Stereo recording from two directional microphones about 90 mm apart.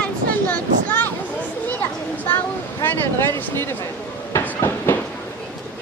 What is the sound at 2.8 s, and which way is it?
Speech, 25° left (ahead or behind).